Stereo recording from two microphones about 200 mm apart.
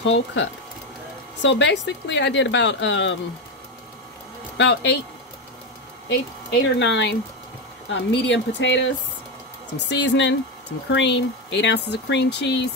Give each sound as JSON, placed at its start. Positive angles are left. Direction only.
{"t": 0.0, "sound": "speech", "side_deg": 65}
{"t": 4.6, "sound": "speech", "side_deg": 65}
{"t": 6.0, "sound": "speech", "side_deg": 65}